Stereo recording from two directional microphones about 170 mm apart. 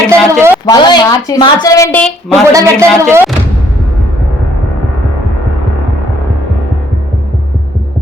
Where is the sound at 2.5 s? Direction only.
15° right (ahead or behind).